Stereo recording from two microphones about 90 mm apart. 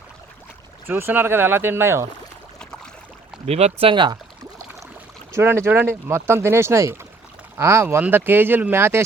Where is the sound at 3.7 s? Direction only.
75° right (ahead or behind).